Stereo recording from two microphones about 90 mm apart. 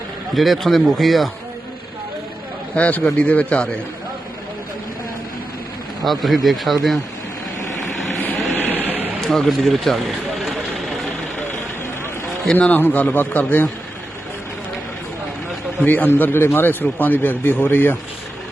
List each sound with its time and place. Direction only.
0.3 s a man's voice: centre (ahead or behind)
2.7 s a man's voice: 15° left (ahead or behind)
6.1 s a man's voice: centre (ahead or behind)
8.7 s vehicle: 20° right (ahead or behind)
9.2 s vehicle: 5° left (ahead or behind)
12.5 s a man's voice: 20° left (ahead or behind)
15.8 s a man's voice: 20° left (ahead or behind)